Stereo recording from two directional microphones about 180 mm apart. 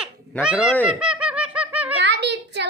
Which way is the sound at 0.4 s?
5° right (ahead or behind).